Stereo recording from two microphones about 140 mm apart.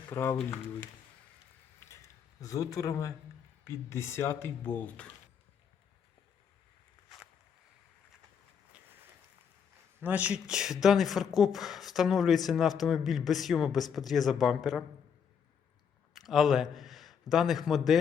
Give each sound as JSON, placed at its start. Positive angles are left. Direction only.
{"t": 0.1, "sound": "speech", "side_deg": 15}
{"t": 1.9, "sound": "a sound", "side_deg": 25}
{"t": 3.6, "sound": "speech", "side_deg": 20}
{"t": 10.0, "sound": "speech", "side_deg": -10}
{"t": 16.1, "sound": "a man's voice", "side_deg": 0}